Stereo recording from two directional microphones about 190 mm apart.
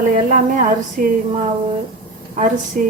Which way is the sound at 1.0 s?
50° right (ahead or behind).